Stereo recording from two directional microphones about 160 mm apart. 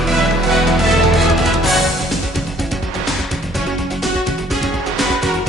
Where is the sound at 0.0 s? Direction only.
Centre (ahead or behind).